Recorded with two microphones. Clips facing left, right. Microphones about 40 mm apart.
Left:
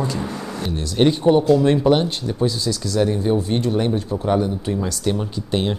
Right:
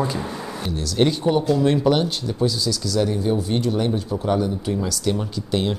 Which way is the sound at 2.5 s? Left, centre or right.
Left.